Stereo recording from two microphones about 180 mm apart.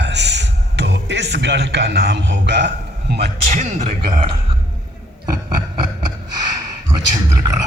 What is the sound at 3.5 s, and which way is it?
Speech, 40° right (ahead or behind).